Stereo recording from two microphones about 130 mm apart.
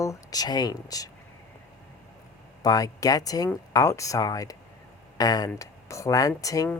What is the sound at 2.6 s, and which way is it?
Speech, 30° left (ahead or behind).